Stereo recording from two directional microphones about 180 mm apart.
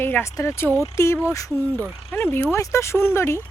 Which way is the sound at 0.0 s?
15° left (ahead or behind).